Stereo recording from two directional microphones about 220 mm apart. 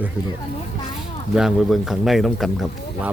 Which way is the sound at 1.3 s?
Centre (ahead or behind).